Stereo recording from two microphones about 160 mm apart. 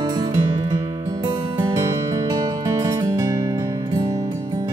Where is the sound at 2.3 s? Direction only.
20° right (ahead or behind).